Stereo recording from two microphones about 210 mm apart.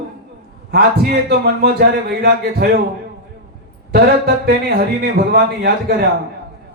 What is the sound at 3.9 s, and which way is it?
A man's voice, 45° right (ahead or behind).